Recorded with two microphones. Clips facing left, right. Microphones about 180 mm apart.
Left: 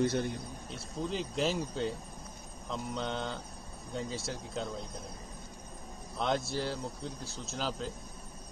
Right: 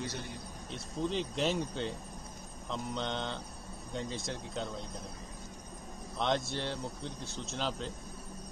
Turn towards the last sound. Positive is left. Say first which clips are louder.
# even
turn(degrees=0)  # may be behind; listen again after turning